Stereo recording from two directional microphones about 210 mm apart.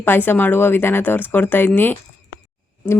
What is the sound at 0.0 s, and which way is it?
Speech, 10° left (ahead or behind).